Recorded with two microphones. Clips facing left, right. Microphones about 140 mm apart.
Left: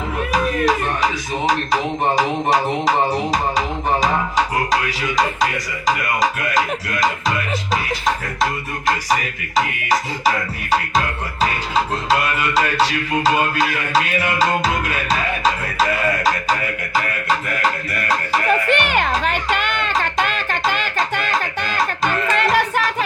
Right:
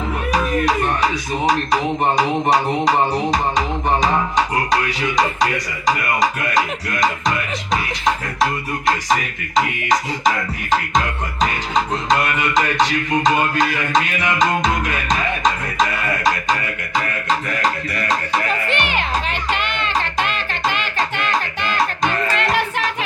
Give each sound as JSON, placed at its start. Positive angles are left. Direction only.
{"t": 1.5, "sound": "music", "side_deg": 0}
{"t": 5.8, "sound": "music", "side_deg": 0}
{"t": 10.7, "sound": "music", "side_deg": 5}
{"t": 16.9, "sound": "music", "side_deg": 5}
{"t": 18.4, "sound": "music", "side_deg": 50}